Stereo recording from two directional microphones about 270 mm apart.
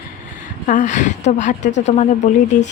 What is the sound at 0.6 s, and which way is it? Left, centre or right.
A woman's voice, left.